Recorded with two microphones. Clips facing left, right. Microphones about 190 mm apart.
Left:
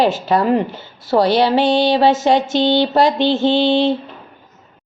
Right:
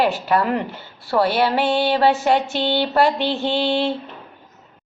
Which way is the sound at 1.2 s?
90° left.